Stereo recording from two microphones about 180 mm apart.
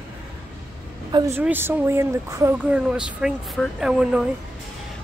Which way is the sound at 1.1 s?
15° right (ahead or behind).